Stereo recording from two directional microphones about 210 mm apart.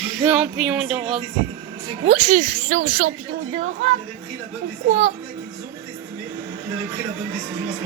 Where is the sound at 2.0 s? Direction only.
30° right (ahead or behind).